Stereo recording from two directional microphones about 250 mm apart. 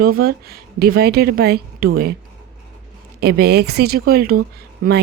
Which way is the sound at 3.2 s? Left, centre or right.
Right.